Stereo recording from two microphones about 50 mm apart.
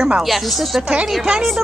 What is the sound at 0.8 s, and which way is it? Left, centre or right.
Speech, centre.